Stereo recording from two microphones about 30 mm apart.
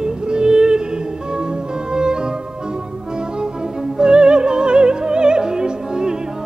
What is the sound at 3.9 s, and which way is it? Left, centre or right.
Music, right.